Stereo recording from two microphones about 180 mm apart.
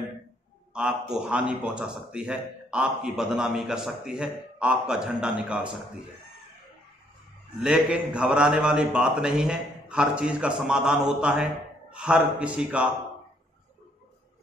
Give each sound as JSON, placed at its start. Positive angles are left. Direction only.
{"t": 0.7, "sound": "a man's voice", "side_deg": -5}
{"t": 7.6, "sound": "a man's voice", "side_deg": -5}